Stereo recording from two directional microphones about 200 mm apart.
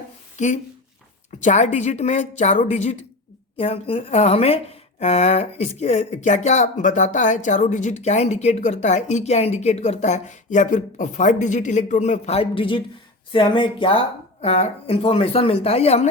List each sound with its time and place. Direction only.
0.3 s a woman's voice: 35° left (ahead or behind)